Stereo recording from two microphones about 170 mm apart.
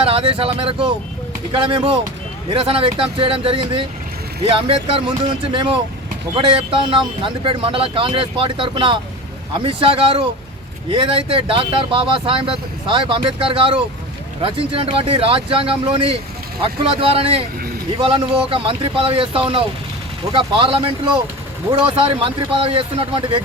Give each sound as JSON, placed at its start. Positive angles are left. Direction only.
{"t": 0.0, "sound": "speech", "side_deg": -35}